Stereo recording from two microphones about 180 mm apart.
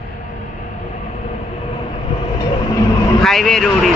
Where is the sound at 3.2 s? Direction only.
Centre (ahead or behind).